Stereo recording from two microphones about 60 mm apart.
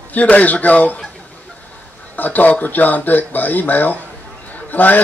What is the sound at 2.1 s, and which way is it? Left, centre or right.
Speech, left.